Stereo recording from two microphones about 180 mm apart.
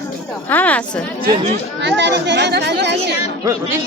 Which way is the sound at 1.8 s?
75° right (ahead or behind).